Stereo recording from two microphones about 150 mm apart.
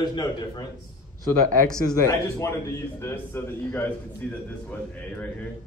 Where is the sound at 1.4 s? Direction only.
65° right (ahead or behind).